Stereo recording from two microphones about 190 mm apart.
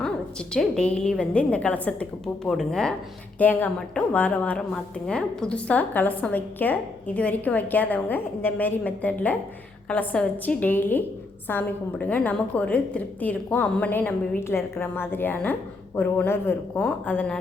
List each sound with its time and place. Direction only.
0.5 s a woman's voice: 5° left (ahead or behind)